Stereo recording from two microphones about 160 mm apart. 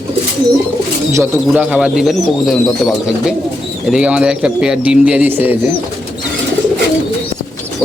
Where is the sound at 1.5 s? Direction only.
10° right (ahead or behind).